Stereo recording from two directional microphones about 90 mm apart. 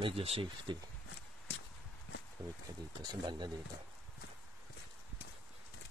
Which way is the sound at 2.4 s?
30° right (ahead or behind).